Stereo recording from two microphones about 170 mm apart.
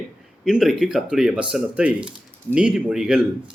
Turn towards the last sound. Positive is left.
turn(degrees=-5)  # may be behind; listen again after turning